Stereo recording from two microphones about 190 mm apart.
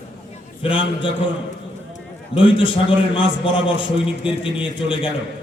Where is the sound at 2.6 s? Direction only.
25° left (ahead or behind).